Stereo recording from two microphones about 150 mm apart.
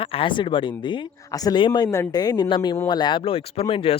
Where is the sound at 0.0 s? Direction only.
35° left (ahead or behind).